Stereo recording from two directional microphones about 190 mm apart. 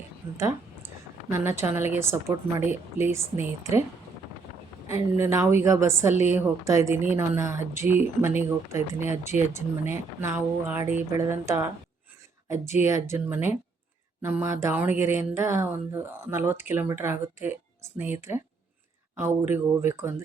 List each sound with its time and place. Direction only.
0.3 s a sound: 15° right (ahead or behind)
1.3 s a woman's voice: 15° right (ahead or behind)
5.1 s a woman's voice: 15° right (ahead or behind)
12.8 s a woman's voice: 15° right (ahead or behind)